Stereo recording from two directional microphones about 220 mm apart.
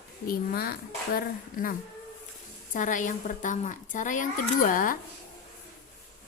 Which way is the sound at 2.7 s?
35° left (ahead or behind).